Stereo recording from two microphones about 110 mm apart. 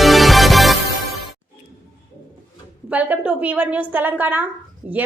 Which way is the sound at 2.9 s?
15° right (ahead or behind).